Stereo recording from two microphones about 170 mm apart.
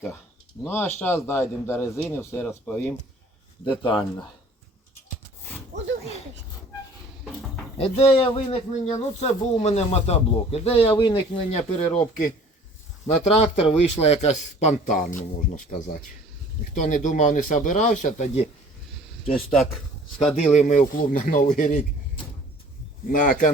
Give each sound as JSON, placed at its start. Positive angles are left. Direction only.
{"t": 0.6, "sound": "a man's voice", "side_deg": 15}
{"t": 3.7, "sound": "speech", "side_deg": 30}
{"t": 5.7, "sound": "a sound", "side_deg": -45}
{"t": 7.8, "sound": "speech", "side_deg": 35}
{"t": 13.4, "sound": "a man's voice", "side_deg": 40}
{"t": 19.3, "sound": "speech", "side_deg": 5}
{"t": 20.3, "sound": "a man's voice", "side_deg": 45}
{"t": 23.0, "sound": "a man's voice", "side_deg": 50}